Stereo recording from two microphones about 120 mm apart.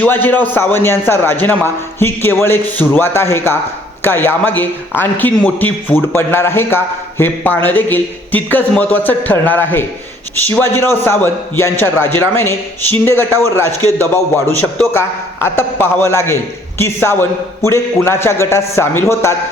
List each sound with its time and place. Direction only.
0.0 s a man's voice: 15° left (ahead or behind)